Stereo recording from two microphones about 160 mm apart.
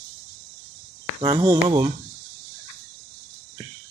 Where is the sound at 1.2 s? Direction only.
25° right (ahead or behind).